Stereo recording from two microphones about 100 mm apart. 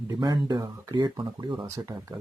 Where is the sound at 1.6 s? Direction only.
30° right (ahead or behind).